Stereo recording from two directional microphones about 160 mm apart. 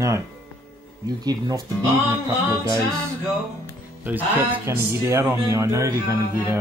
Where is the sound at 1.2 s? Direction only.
25° right (ahead or behind).